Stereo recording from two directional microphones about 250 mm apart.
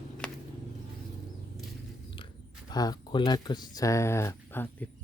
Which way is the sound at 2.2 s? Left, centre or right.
Centre.